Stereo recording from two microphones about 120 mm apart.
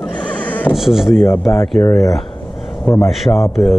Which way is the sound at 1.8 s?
25° left (ahead or behind).